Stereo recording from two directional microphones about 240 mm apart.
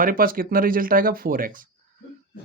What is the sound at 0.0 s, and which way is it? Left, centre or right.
Speech, right.